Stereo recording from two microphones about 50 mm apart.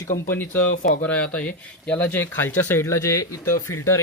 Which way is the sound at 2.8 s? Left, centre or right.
Left.